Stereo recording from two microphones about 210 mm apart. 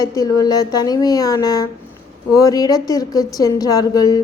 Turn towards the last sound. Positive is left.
turn(degrees=15)  # may be behind; listen again after turning